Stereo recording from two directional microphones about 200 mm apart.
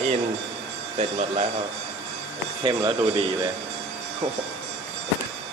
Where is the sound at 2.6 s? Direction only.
25° right (ahead or behind).